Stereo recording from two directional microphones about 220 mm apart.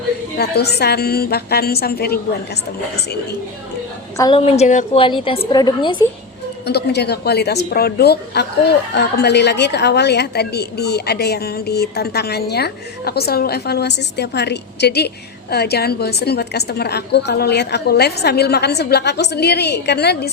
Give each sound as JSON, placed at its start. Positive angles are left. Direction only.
{"t": 0.3, "sound": "a woman's voice", "side_deg": 45}
{"t": 4.2, "sound": "a woman's voice", "side_deg": 25}
{"t": 5.0, "sound": "a woman's voice", "side_deg": 25}
{"t": 6.7, "sound": "a woman's voice", "side_deg": 50}